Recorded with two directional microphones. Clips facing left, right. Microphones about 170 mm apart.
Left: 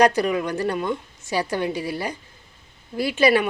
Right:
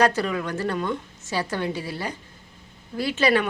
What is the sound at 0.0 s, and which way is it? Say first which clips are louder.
A woman's voice: left 3 dB; 15° left (ahead or behind).